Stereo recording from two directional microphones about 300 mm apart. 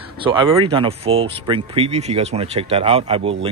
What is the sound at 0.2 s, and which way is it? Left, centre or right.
Speech, centre.